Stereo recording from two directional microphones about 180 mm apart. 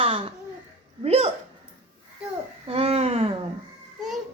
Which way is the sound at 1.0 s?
35° right (ahead or behind).